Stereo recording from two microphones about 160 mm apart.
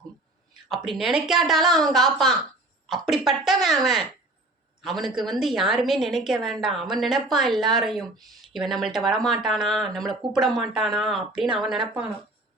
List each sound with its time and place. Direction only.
0.7 s speech: centre (ahead or behind)